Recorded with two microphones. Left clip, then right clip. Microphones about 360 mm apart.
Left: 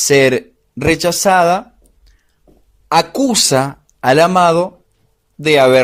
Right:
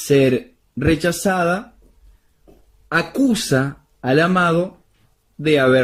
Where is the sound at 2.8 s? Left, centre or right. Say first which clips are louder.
Left 5 dB; centre.